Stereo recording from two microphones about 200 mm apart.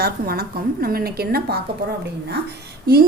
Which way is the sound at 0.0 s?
50° right (ahead or behind).